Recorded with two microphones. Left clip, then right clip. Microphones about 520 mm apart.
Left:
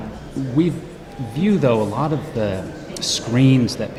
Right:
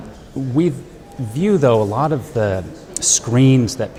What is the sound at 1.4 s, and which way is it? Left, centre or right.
Speech, right.